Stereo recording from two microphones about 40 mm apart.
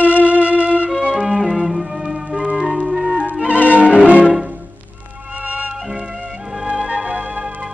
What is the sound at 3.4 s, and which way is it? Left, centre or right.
Music, right.